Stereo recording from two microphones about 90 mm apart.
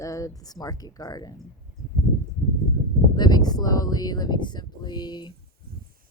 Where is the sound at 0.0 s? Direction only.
40° left (ahead or behind).